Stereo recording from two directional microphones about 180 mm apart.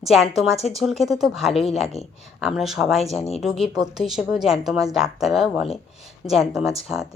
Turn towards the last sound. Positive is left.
turn(degrees=-5)  # may be behind; listen again after turning